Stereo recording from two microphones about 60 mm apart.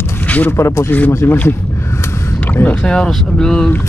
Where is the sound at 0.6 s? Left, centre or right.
Left.